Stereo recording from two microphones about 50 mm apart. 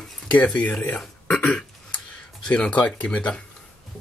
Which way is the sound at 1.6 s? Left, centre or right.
Left.